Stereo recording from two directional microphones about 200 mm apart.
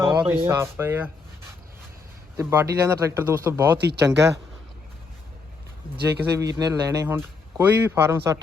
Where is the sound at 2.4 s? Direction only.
15° right (ahead or behind).